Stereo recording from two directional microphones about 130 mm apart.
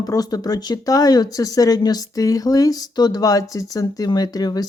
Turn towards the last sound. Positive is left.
turn(degrees=30)  # may be behind; listen again after turning